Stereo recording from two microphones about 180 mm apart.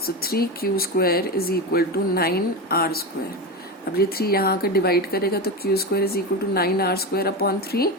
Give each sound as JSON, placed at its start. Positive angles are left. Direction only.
{"t": 0.0, "sound": "speech", "side_deg": 60}